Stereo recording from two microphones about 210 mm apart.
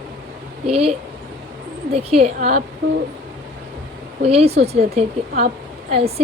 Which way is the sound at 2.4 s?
40° right (ahead or behind).